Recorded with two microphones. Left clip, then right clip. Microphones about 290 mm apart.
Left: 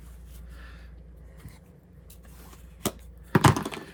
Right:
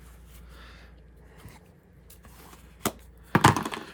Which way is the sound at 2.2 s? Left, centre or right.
Centre.